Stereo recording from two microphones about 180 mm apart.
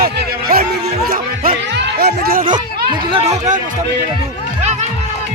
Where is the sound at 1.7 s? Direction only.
60° right (ahead or behind).